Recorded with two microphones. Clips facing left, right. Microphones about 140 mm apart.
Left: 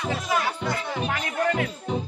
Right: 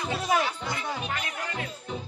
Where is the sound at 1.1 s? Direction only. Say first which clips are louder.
Left 9 dB; 70° left (ahead or behind).